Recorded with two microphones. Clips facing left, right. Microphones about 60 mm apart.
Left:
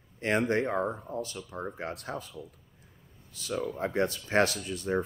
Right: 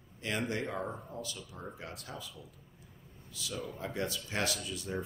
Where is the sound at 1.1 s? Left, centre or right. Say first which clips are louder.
Left 7 dB; left.